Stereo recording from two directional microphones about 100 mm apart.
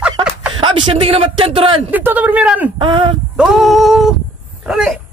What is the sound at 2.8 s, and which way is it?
Speech, 55° right (ahead or behind).